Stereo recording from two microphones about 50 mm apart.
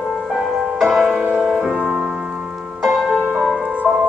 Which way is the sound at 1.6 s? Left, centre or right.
Centre.